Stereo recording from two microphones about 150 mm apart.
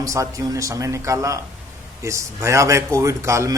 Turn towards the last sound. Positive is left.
turn(degrees=-20)  # may be behind; listen again after turning